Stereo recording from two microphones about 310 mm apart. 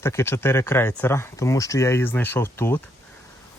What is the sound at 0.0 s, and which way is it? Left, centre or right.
Speech, centre.